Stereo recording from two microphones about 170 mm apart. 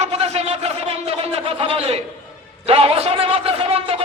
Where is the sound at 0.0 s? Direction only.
40° right (ahead or behind).